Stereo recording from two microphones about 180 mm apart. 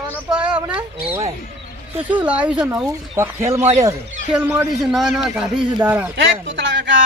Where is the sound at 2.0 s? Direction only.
10° right (ahead or behind).